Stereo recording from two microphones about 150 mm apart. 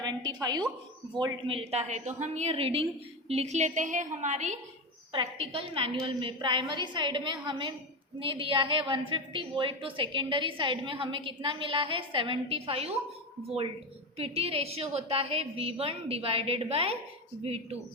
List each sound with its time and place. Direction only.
0.0 s a woman's voice: 30° right (ahead or behind); by 4.5 s 50° right (ahead or behind)
5.1 s a woman's voice: 35° right (ahead or behind)
14.2 s a woman's voice: 40° right (ahead or behind)